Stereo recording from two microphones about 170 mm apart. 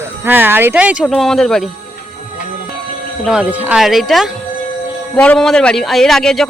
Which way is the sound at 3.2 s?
5° right (ahead or behind).